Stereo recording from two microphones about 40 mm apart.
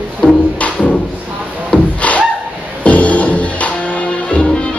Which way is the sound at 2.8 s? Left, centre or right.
Left.